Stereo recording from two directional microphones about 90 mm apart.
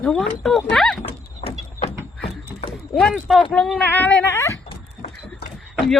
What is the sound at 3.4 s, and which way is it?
Speech, 10° left (ahead or behind).